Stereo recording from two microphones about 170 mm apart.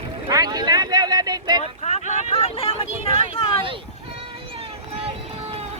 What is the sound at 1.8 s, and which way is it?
Vehicle, 40° left (ahead or behind).